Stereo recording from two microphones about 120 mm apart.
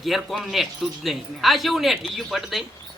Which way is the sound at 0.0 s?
Centre (ahead or behind).